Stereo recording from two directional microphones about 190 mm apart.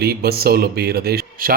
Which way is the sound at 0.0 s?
55° right (ahead or behind).